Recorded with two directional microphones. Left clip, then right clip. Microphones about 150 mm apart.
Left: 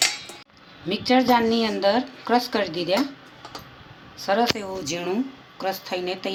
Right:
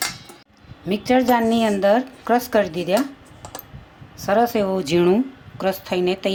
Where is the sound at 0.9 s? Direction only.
80° right.